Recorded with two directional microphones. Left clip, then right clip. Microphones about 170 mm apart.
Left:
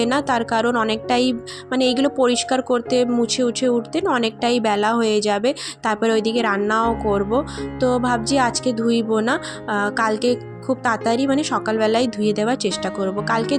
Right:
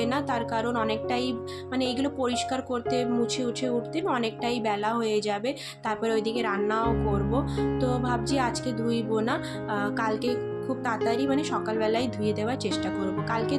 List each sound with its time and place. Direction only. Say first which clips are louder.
0.0 s speech: left 8 dB; 45° left (ahead or behind)